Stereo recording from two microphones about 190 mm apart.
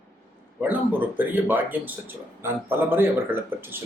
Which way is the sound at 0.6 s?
10° right (ahead or behind).